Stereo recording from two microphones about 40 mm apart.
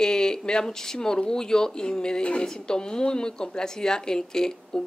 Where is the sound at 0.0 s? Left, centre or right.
Centre.